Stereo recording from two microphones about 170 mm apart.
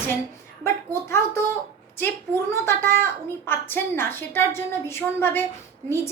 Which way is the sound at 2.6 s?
15° left (ahead or behind).